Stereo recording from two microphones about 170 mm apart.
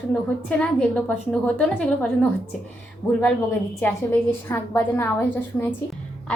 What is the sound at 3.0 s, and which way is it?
A woman's voice, 20° left (ahead or behind).